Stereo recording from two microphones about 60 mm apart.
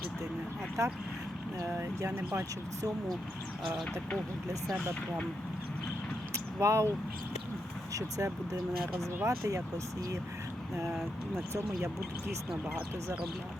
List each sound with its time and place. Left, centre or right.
0.8 s speech: right
2.0 s speech: right
6.3 s vehicle: right
7.9 s speech: right
9.2 s speech: right
10.8 s speech: centre